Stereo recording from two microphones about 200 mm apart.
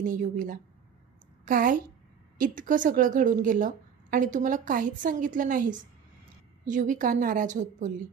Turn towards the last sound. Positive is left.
turn(degrees=-40)  # may be behind; listen again after turning